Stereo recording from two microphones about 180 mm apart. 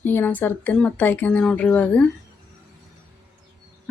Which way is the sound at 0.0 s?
10° left (ahead or behind).